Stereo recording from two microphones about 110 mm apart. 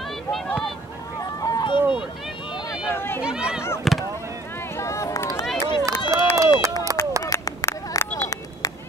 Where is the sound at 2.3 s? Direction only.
50° left (ahead or behind).